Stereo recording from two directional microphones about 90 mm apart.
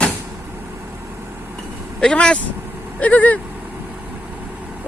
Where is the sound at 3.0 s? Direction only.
15° left (ahead or behind).